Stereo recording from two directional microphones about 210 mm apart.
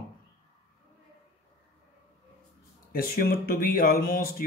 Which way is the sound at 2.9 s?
45° left (ahead or behind).